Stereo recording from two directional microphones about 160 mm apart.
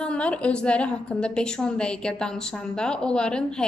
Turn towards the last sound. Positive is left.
turn(degrees=5)  # may be behind; listen again after turning